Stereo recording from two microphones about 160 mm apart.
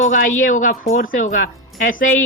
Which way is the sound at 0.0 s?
55° left (ahead or behind).